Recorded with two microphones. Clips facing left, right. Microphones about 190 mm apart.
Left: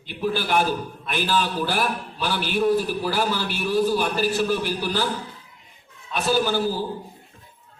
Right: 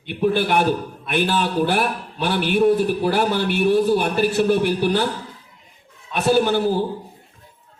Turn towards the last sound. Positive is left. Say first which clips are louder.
# right 5 dB
turn(degrees=-60)  # may be behind; listen again after turning